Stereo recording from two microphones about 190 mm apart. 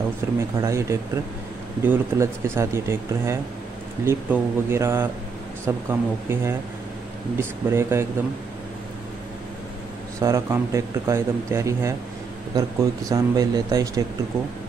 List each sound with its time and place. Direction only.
0.2 s speech: 10° right (ahead or behind)
10.2 s speech: 15° right (ahead or behind)